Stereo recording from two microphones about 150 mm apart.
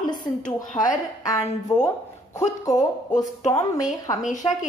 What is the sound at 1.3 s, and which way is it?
A woman's voice, 20° left (ahead or behind).